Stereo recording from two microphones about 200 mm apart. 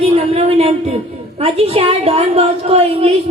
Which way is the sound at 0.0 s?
30° right (ahead or behind).